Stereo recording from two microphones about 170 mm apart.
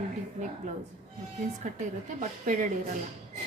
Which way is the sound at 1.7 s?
45° right (ahead or behind).